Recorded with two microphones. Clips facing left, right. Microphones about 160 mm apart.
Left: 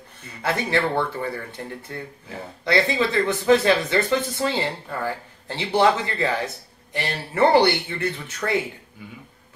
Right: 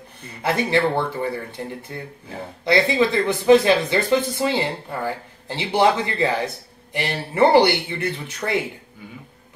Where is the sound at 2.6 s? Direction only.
15° right (ahead or behind).